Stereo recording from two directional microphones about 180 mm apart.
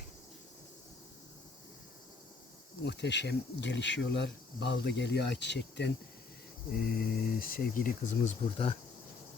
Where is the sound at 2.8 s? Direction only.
70° left (ahead or behind).